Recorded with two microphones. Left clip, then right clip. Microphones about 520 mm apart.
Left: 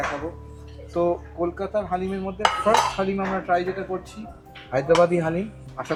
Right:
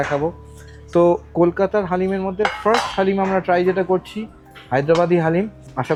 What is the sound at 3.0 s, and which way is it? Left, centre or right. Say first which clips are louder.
Speech: right 7 dB; right.